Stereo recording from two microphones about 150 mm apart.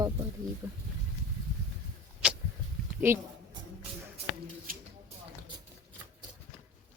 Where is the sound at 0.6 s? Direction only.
15° right (ahead or behind).